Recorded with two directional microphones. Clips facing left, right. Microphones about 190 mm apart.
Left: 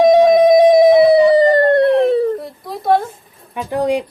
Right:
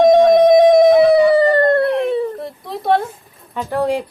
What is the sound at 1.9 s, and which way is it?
Dog, 35° left (ahead or behind).